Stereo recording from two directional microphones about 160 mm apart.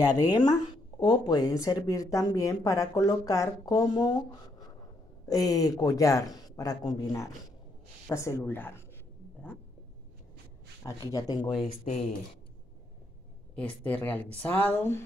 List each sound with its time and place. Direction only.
0.0 s speech: 25° left (ahead or behind)
10.8 s speech: 20° left (ahead or behind)
11.6 s speech: 45° left (ahead or behind)
13.6 s speech: 10° left (ahead or behind)